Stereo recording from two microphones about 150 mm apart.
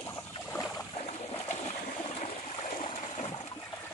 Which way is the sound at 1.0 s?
45° left (ahead or behind).